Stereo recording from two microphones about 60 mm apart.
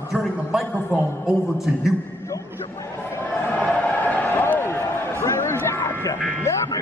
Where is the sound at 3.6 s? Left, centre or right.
Left.